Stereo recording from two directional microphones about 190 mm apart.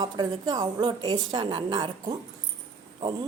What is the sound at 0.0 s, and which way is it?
Speech, 20° right (ahead or behind).